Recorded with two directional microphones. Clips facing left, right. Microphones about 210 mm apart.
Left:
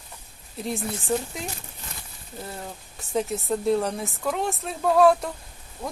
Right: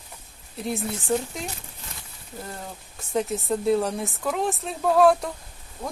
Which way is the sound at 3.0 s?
Centre (ahead or behind).